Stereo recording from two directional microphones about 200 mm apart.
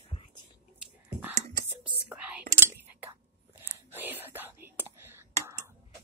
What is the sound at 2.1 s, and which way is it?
Whispering, 5° right (ahead or behind).